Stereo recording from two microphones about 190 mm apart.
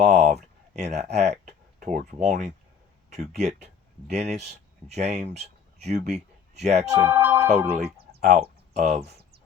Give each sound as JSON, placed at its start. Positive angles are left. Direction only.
{"t": 0.0, "sound": "speech", "side_deg": -40}
{"t": 6.9, "sound": "speech", "side_deg": -15}
{"t": 8.1, "sound": "speech", "side_deg": -55}